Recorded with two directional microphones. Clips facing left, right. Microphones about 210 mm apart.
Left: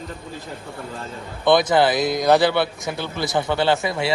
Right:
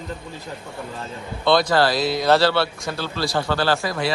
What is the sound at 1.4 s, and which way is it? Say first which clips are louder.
A man's voice: left 2 dB; 20° left (ahead or behind).